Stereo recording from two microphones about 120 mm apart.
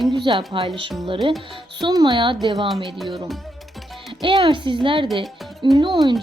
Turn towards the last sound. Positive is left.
turn(degrees=-40)  # may be behind; listen again after turning